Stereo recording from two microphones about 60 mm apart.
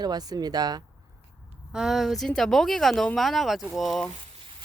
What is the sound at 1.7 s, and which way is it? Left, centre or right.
Speech, centre.